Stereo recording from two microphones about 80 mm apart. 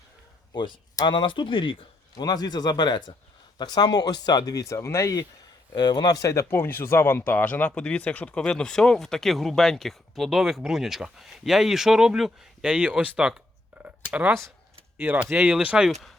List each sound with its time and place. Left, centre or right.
0.5 s speech: left
2.1 s speech: left
5.7 s speech: left
6.5 s speech: left; by 15.2 s right
15.3 s speech: centre
15.9 s speech: centre